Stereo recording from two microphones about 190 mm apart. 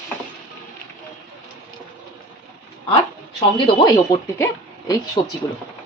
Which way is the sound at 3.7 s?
20° left (ahead or behind).